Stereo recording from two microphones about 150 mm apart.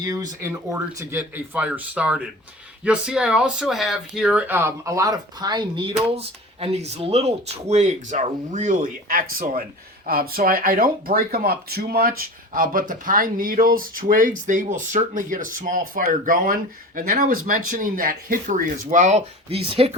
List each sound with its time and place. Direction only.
0.0 s speech: 20° right (ahead or behind)
1.5 s speech: 10° right (ahead or behind); by 12.1 s 90° right
12.5 s speech: 70° right (ahead or behind); by 20.0 s 40° right (ahead or behind)